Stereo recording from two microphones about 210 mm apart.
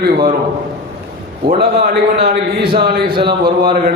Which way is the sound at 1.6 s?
55° right (ahead or behind).